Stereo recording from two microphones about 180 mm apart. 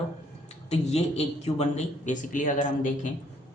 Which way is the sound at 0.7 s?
35° left (ahead or behind).